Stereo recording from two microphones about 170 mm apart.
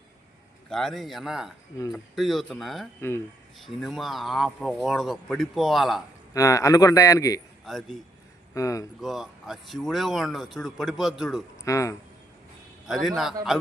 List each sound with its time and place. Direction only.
0.7 s speech: centre (ahead or behind)
6.3 s a man's voice: 20° left (ahead or behind)
7.6 s a man's voice: centre (ahead or behind)
8.5 s a man's voice: 20° left (ahead or behind)
9.0 s speech: centre (ahead or behind)
11.6 s a man's voice: 20° left (ahead or behind)
12.9 s speech: centre (ahead or behind)